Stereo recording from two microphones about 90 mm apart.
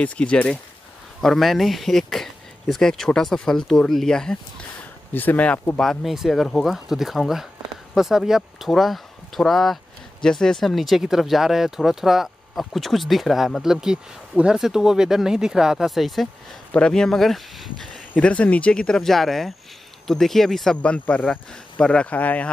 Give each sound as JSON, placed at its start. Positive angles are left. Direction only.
{"t": 0.0, "sound": "speech", "side_deg": 15}
{"t": 1.2, "sound": "speech", "side_deg": 0}
{"t": 5.1, "sound": "speech", "side_deg": 20}
{"t": 5.8, "sound": "speech", "side_deg": 0}
{"t": 18.1, "sound": "speech", "side_deg": 15}